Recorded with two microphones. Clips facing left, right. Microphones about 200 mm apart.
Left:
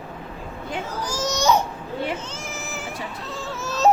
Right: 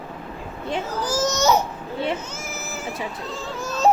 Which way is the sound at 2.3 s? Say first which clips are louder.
Even; 5° right (ahead or behind).